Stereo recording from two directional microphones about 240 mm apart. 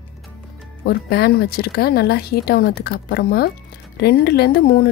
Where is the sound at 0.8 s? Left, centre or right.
Left.